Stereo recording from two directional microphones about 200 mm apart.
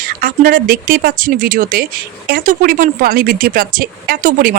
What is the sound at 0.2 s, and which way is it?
Speech, 45° right (ahead or behind).